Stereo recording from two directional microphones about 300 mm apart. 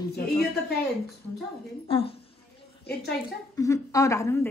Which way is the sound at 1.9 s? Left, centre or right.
Centre.